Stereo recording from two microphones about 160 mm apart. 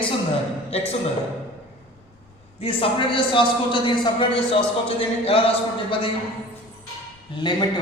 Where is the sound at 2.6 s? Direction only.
35° left (ahead or behind).